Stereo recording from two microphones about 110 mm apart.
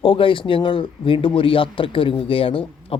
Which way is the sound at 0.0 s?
50° left (ahead or behind).